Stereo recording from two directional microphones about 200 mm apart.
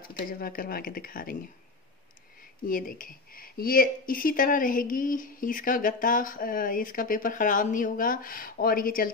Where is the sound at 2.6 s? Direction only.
45° left (ahead or behind).